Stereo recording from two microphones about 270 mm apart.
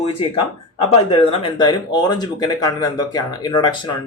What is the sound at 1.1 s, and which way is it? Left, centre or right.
Speech, centre.